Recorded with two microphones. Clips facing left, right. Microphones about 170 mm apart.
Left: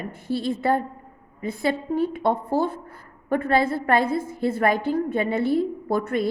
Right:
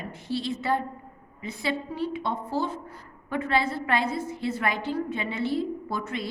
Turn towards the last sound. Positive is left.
turn(degrees=55)  # may be behind; listen again after turning